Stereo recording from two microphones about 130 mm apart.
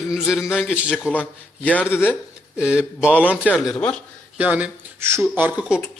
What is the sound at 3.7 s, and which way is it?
Speech, 5° left (ahead or behind).